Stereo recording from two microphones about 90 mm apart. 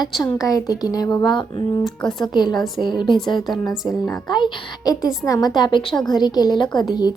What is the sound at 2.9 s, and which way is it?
Speech, 60° left (ahead or behind).